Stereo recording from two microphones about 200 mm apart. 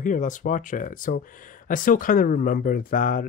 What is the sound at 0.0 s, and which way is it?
Speech, 40° left (ahead or behind).